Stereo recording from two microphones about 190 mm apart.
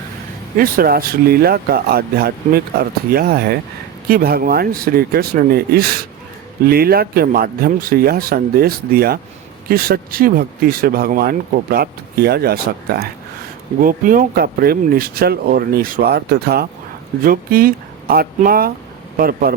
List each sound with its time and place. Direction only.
0.5 s speech: 50° right (ahead or behind)